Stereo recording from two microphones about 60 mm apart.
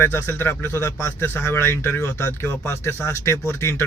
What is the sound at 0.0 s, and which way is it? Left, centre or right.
A man's voice, left.